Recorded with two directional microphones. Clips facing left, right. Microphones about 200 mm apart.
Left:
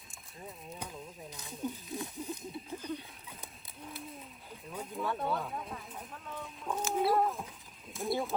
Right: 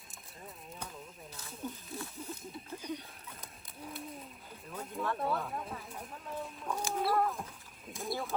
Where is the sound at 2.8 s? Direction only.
15° right (ahead or behind).